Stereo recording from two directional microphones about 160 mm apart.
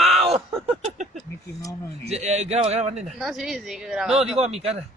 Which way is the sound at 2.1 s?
45° right (ahead or behind).